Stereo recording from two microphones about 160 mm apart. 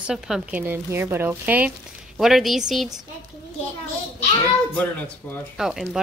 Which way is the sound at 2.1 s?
Centre (ahead or behind).